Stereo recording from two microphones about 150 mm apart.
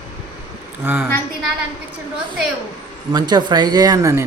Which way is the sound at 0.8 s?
15° right (ahead or behind).